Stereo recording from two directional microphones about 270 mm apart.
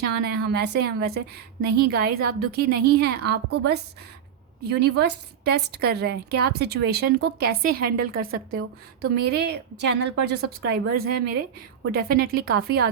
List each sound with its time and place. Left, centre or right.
0.0 s a woman's voice: right